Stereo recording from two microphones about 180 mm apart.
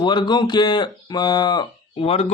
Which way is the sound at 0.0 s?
25° left (ahead or behind).